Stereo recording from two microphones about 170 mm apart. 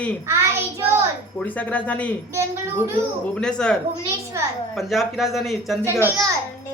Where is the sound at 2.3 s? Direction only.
15° right (ahead or behind).